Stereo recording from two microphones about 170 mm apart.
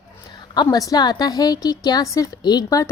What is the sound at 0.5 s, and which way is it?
A woman's voice, 20° left (ahead or behind).